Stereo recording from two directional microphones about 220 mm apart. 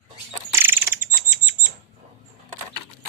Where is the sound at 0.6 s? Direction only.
10° right (ahead or behind).